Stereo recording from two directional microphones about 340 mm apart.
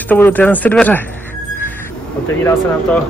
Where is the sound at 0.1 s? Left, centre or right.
Centre.